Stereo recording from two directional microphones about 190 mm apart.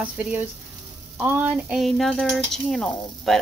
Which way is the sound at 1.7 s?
Centre (ahead or behind).